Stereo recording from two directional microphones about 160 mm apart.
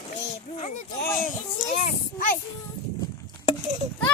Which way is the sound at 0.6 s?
50° left (ahead or behind).